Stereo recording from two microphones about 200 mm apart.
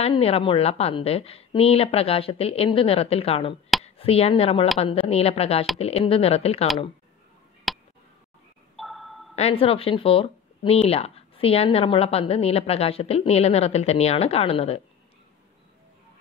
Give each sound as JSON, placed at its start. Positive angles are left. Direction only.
{"t": 0.0, "sound": "a woman's voice", "side_deg": 30}
{"t": 7.7, "sound": "a sound", "side_deg": 0}
{"t": 9.3, "sound": "speech", "side_deg": 30}